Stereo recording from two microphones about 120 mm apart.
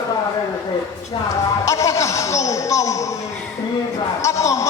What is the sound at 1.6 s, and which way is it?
Music, 25° left (ahead or behind).